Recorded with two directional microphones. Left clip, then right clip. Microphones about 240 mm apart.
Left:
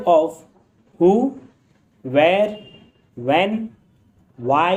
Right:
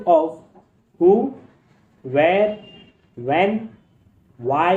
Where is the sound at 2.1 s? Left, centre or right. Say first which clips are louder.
Left 1 dB; left.